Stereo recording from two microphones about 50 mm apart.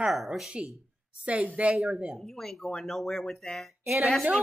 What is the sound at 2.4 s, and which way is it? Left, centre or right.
Speech, centre.